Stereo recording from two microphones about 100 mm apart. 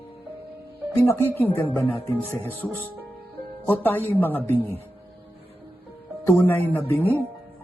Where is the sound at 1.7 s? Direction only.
15° left (ahead or behind).